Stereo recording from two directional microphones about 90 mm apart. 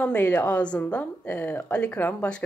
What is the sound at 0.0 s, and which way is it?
Speech, 15° left (ahead or behind).